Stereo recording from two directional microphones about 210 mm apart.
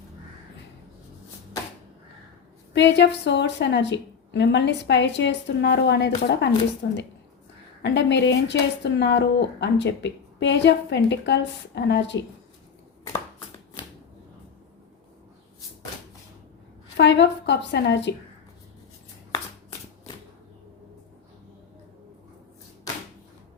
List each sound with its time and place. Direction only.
2.7 s speech: 55° left (ahead or behind)
7.8 s speech: 55° left (ahead or behind)
17.0 s speech: 55° left (ahead or behind)